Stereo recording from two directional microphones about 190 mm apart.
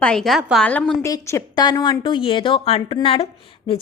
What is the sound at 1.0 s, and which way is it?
A woman's voice, 15° left (ahead or behind).